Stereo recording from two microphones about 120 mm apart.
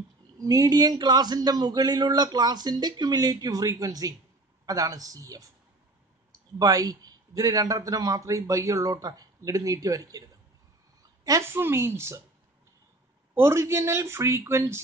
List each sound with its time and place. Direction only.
0.4 s a man's voice: 30° right (ahead or behind)
13.3 s speech: 20° right (ahead or behind)